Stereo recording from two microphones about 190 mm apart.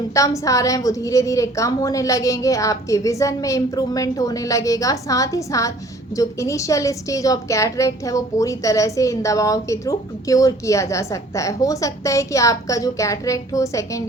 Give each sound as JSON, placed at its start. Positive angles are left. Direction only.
{"t": 0.1, "sound": "a woman's voice", "side_deg": 15}